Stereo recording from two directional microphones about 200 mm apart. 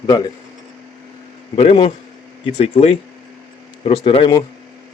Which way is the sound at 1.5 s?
30° left (ahead or behind).